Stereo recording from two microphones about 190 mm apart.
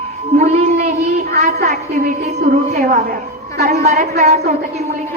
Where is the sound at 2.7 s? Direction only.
50° right (ahead or behind).